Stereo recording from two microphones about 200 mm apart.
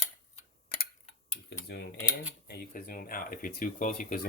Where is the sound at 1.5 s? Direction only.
60° left (ahead or behind).